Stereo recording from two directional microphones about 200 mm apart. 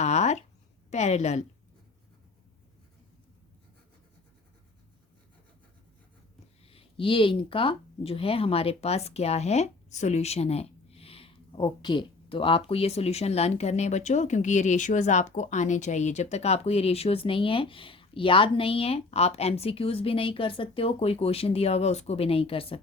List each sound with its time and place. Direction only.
0.0 s a sound: 35° left (ahead or behind)
0.9 s a woman's voice: 35° left (ahead or behind)
6.7 s speech: 30° left (ahead or behind)